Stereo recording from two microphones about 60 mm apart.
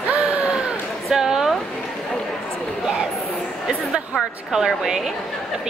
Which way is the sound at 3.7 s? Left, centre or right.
Centre.